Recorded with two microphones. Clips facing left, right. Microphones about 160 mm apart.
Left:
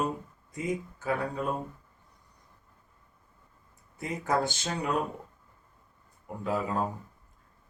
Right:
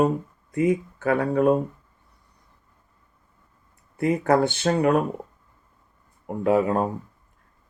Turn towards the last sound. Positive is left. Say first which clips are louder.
# right 9 dB
turn(degrees=-65)  # may be behind; listen again after turning